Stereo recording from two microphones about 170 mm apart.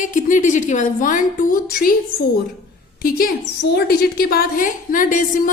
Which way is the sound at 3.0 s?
60° left (ahead or behind).